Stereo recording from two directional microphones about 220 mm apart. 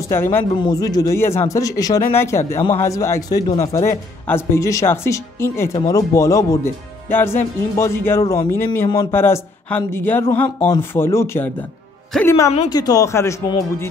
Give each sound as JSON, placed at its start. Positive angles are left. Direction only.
{"t": 0.1, "sound": "speech", "side_deg": 10}